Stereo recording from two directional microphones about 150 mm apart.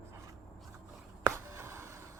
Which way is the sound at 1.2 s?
20° right (ahead or behind).